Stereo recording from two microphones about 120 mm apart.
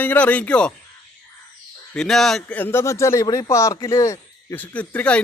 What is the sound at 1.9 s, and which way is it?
Speech, 5° left (ahead or behind).